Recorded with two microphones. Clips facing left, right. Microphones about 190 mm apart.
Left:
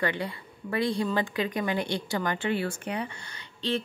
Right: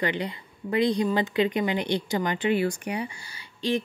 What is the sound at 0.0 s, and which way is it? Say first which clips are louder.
Speech: right 2 dB; 20° right (ahead or behind).